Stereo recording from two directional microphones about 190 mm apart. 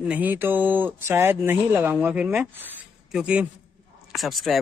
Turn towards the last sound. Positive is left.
turn(degrees=0)  # may be behind; listen again after turning